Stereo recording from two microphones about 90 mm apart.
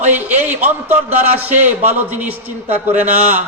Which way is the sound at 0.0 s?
20° right (ahead or behind).